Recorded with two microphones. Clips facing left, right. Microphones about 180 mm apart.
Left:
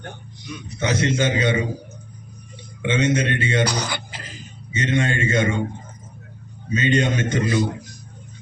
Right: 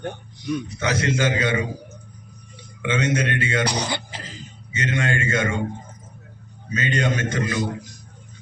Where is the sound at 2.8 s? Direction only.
25° left (ahead or behind).